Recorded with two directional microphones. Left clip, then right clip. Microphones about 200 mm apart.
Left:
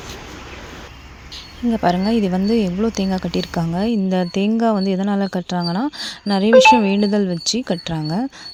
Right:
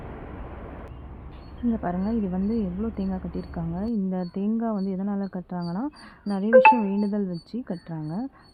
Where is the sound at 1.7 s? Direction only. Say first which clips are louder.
Left 15 dB; 35° left (ahead or behind).